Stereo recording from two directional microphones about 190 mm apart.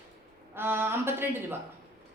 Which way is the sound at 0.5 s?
10° right (ahead or behind).